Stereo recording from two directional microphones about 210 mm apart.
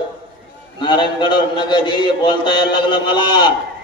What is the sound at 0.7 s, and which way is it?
A man's voice, 20° left (ahead or behind).